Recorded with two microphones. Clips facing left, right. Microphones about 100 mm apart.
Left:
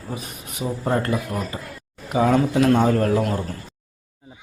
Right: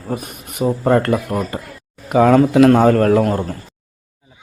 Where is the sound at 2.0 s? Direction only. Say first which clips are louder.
Right 7 dB; 75° right (ahead or behind).